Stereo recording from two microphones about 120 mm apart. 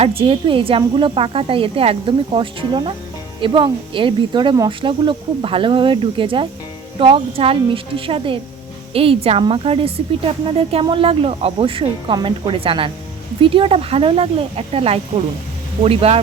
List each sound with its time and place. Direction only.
0.0 s speech: 50° right (ahead or behind)